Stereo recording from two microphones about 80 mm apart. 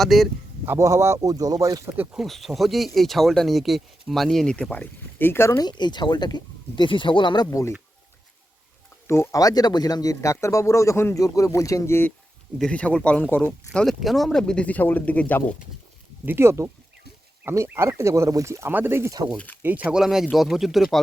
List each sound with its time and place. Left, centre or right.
0.0 s speech: centre
0.6 s speech: right
0.9 s speech: right
2.1 s speech: centre; by 5.6 s left
5.6 s speech: left
9.0 s speech: left
9.4 s a man's voice: left
12.7 s speech: centre
13.8 s speech: centre
16.2 s speech: right
18.7 s speech: right
19.6 s speech: centre
20.0 s speech: centre